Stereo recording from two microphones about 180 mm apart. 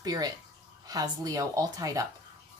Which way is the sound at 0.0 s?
20° right (ahead or behind).